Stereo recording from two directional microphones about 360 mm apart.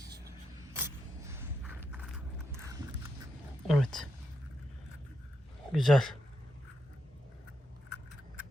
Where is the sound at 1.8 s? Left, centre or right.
Centre.